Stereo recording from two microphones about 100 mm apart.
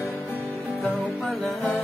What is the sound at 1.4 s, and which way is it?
Music, 15° left (ahead or behind).